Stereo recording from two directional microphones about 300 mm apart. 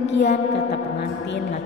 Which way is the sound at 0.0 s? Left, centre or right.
Left.